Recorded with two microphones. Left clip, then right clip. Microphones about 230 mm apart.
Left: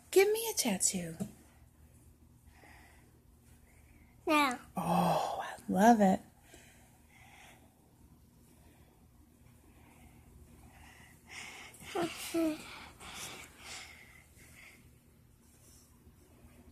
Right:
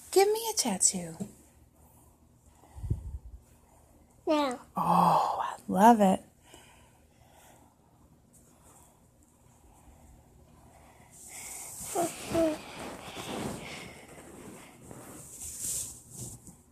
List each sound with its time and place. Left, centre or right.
0.1 s a woman's voice: centre
4.3 s a child's voice: left
4.7 s gasp: centre
11.9 s wheeze: left
13.7 s a sound: left